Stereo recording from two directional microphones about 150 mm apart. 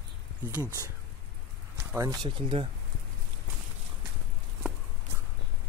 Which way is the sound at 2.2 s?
35° right (ahead or behind).